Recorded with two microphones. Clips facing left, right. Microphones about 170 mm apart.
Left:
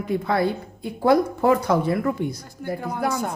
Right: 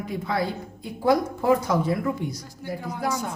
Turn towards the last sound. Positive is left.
turn(degrees=55)  # may be behind; listen again after turning